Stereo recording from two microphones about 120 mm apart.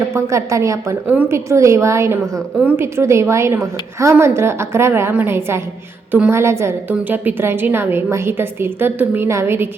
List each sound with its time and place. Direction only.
0.1 s a woman's voice: 25° right (ahead or behind)
1.0 s a woman's voice: 15° right (ahead or behind)
1.5 s a woman's voice: 25° right (ahead or behind)
2.6 s a woman's voice: 10° right (ahead or behind)
2.8 s a woman's voice: 20° right (ahead or behind)
6.3 s a woman's voice: 20° right (ahead or behind)